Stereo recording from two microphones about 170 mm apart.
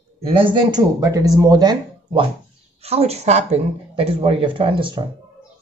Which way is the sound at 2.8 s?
35° right (ahead or behind).